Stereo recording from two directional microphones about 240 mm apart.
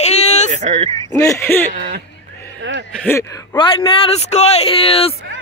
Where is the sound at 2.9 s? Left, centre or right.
Centre.